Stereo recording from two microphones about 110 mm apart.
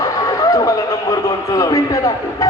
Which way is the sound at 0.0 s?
30° left (ahead or behind).